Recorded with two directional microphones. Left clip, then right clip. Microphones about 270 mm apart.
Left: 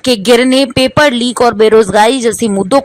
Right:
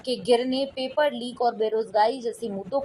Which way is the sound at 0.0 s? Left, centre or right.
Left.